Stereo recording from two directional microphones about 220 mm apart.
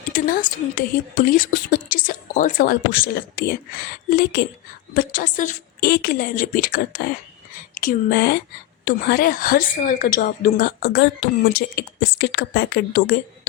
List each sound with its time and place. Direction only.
0.0 s a woman's voice: 40° left (ahead or behind)